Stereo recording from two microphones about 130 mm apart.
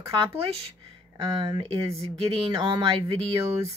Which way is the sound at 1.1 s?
30° right (ahead or behind).